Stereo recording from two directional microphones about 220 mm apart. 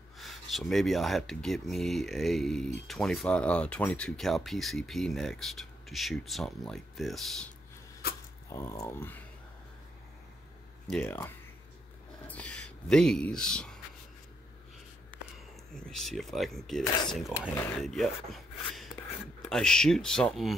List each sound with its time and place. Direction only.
0.2 s speech: centre (ahead or behind)
8.5 s speech: 15° left (ahead or behind)
10.9 s speech: 5° left (ahead or behind)
15.9 s speech: centre (ahead or behind)
16.8 s speech: 20° left (ahead or behind)
17.1 s speech: centre (ahead or behind)